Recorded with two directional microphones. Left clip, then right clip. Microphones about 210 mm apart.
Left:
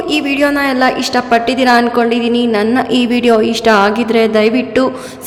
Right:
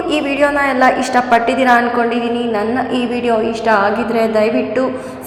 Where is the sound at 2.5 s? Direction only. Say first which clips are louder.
Left 4 dB; 35° left (ahead or behind).